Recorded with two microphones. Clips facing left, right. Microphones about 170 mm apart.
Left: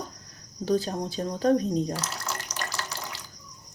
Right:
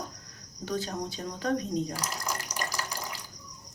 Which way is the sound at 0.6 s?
30° left (ahead or behind).